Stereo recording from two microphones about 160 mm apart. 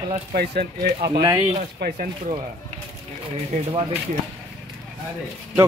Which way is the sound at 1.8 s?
90° right.